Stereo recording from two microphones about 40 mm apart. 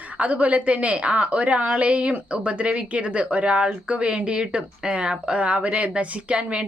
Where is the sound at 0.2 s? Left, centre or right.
Right.